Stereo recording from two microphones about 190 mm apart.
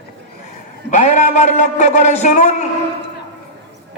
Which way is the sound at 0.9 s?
40° left (ahead or behind).